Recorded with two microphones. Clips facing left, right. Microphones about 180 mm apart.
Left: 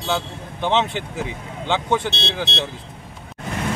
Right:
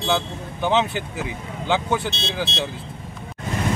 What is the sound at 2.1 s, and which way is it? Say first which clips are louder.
Speech: left 1 dB; 70° left (ahead or behind).